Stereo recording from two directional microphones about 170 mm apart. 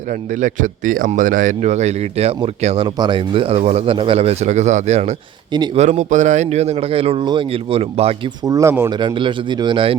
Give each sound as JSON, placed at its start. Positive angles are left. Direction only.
{"t": 0.1, "sound": "speech", "side_deg": -45}
{"t": 8.4, "sound": "speech", "side_deg": -20}
{"t": 9.0, "sound": "speech", "side_deg": -30}